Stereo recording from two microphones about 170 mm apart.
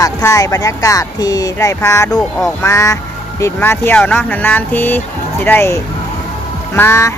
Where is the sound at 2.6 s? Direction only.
15° left (ahead or behind).